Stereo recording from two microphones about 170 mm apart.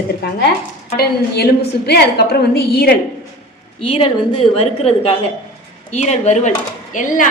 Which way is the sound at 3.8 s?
35° left (ahead or behind).